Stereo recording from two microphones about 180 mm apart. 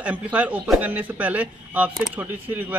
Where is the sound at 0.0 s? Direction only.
10° right (ahead or behind).